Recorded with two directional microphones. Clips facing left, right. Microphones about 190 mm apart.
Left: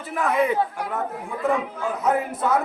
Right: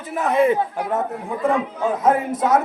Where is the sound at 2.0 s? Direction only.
90° right.